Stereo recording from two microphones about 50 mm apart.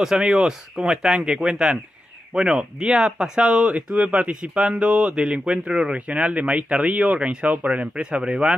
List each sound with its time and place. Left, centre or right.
0.0 s speech: centre; by 7.8 s right
7.8 s speech: right